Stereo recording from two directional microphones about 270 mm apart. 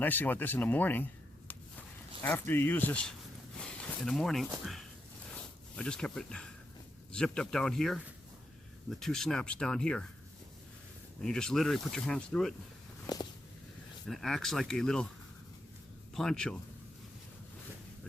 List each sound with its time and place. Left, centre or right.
0.0 s speech: centre
2.2 s speech: centre
11.2 s speech: centre
13.1 s speech: centre
14.1 s speech: centre
16.1 s speech: centre